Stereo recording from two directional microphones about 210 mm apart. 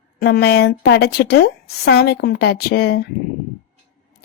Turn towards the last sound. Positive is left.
turn(degrees=50)  # may be behind; listen again after turning